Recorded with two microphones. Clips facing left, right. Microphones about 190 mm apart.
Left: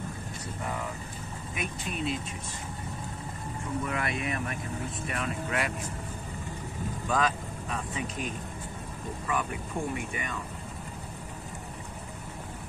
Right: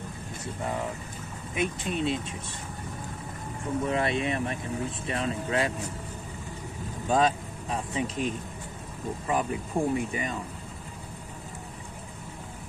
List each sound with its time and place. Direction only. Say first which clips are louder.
1.5 s speech: right 7 dB; 30° right (ahead or behind)
3.8 s speech: right 7 dB; 30° right (ahead or behind)
7.1 s speech: right 5 dB; 30° right (ahead or behind)
9.3 s speech: right 4 dB; 35° right (ahead or behind)